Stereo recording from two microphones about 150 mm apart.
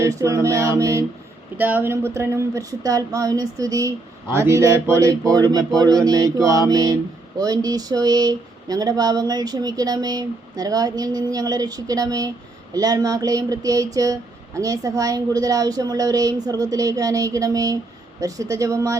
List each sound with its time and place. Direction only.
0.0 s speech: 20° right (ahead or behind)